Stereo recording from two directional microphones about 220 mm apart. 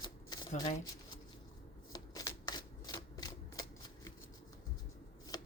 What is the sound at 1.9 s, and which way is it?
Shuffling cards, 15° left (ahead or behind).